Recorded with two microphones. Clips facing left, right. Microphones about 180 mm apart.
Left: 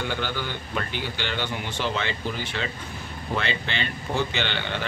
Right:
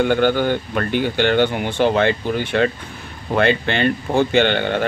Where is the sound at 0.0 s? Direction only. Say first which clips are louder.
Right 13 dB; 55° right (ahead or behind).